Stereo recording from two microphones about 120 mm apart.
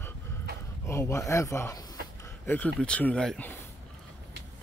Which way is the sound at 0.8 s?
25° left (ahead or behind).